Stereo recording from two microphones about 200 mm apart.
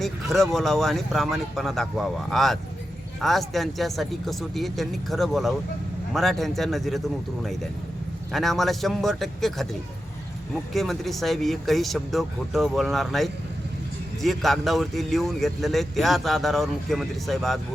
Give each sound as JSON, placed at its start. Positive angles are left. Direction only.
{"t": 0.0, "sound": "speech", "side_deg": 0}
{"t": 8.3, "sound": "speech", "side_deg": 0}
{"t": 10.8, "sound": "speech", "side_deg": 0}